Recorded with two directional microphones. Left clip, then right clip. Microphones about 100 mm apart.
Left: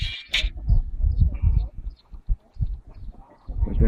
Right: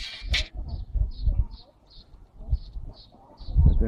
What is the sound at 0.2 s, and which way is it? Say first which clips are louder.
Owl: left 3 dB; 60° right (ahead or behind).